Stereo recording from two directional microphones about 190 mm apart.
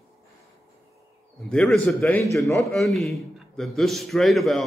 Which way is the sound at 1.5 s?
Centre (ahead or behind).